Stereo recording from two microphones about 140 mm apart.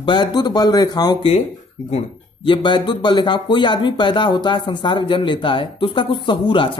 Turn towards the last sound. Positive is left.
turn(degrees=35)  # may be behind; listen again after turning